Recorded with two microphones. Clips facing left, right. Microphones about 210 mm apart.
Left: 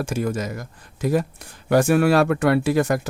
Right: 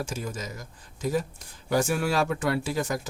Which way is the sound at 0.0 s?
65° left (ahead or behind).